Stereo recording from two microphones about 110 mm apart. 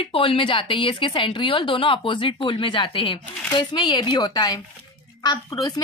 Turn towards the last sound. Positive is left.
turn(degrees=35)  # may be behind; listen again after turning